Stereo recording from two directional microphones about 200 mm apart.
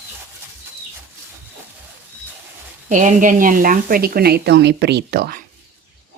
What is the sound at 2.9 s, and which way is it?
A woman's voice, 40° right (ahead or behind).